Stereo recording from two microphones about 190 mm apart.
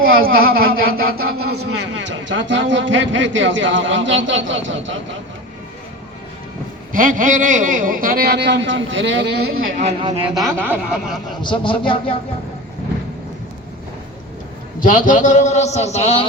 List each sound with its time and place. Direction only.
0.1 s speech: 50° right (ahead or behind); by 4.9 s 80° right
6.9 s speech: 45° right (ahead or behind); by 9.7 s 70° right (ahead or behind)
10.2 s speech: centre (ahead or behind)
11.3 s speech: 25° left (ahead or behind)
14.8 s a man's voice: 45° left (ahead or behind)